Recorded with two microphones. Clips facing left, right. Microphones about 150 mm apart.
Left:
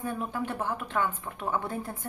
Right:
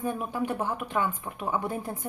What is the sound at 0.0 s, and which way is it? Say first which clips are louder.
Speech: right 2 dB; 15° right (ahead or behind).